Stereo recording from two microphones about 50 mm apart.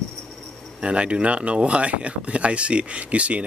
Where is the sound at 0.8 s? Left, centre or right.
Right.